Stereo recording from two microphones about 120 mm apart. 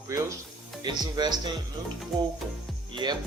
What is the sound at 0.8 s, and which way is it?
Speech, 35° right (ahead or behind).